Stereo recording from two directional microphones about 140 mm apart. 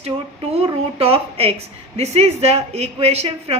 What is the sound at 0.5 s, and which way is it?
A woman's voice, 45° right (ahead or behind).